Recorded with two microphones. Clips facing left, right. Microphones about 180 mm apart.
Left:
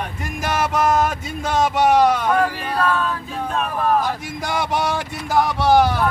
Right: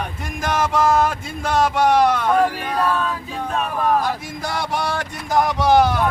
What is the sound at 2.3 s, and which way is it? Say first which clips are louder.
Speech: right 1 dB; 10° right (ahead or behind).